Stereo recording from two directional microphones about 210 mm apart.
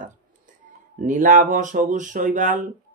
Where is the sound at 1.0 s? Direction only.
40° right (ahead or behind).